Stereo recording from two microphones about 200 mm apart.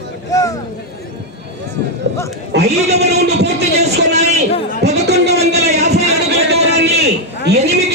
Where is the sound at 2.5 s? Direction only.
60° right (ahead or behind).